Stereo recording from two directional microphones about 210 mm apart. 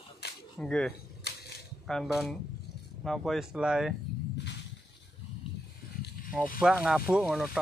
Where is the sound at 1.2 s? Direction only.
50° left (ahead or behind).